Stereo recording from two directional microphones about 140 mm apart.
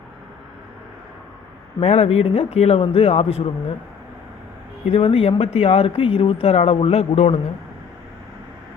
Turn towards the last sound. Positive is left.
turn(degrees=50)  # may be behind; listen again after turning